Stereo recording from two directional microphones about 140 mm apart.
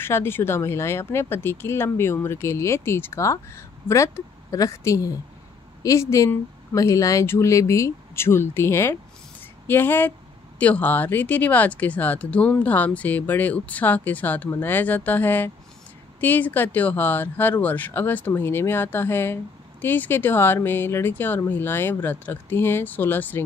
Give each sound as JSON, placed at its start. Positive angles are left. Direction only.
{"t": 0.0, "sound": "speech", "side_deg": 15}